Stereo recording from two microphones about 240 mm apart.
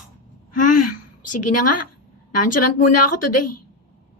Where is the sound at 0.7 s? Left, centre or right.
Left.